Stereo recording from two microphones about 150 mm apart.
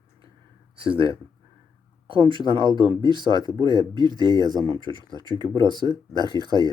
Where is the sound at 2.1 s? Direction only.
35° right (ahead or behind).